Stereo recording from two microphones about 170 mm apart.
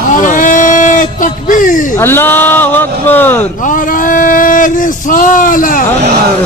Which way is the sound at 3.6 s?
50° left (ahead or behind).